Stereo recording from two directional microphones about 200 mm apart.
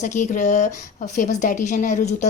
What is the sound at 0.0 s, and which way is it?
A woman's voice, 40° left (ahead or behind).